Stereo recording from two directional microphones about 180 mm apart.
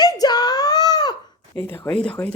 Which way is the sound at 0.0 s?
20° left (ahead or behind).